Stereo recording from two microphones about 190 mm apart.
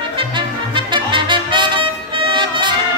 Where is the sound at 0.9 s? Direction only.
25° right (ahead or behind).